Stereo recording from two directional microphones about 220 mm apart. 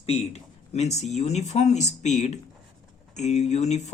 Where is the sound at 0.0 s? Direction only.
25° left (ahead or behind).